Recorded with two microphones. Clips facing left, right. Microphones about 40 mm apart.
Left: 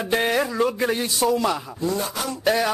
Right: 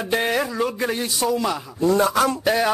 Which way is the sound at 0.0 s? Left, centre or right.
Centre.